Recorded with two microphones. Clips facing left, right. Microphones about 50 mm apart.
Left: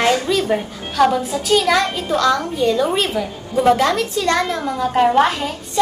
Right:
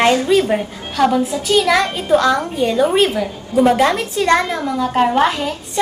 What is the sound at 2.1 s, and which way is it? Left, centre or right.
A woman's voice, right.